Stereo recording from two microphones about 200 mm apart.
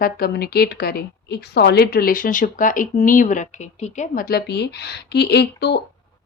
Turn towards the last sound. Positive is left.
turn(degrees=55)  # may be behind; listen again after turning